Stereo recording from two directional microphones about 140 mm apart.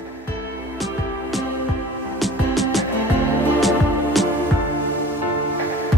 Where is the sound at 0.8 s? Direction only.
Centre (ahead or behind).